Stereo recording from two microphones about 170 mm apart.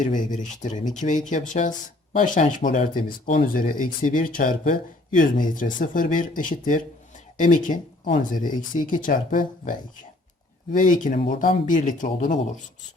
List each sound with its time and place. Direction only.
0.0 s speech: 50° left (ahead or behind)